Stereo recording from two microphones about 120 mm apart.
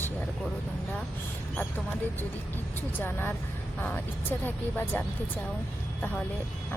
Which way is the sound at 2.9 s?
15° left (ahead or behind).